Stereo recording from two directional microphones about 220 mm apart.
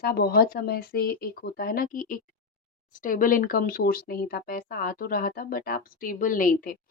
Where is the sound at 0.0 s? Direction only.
45° left (ahead or behind).